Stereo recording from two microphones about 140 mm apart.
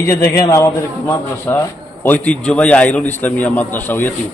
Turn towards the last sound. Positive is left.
turn(degrees=15)  # may be behind; listen again after turning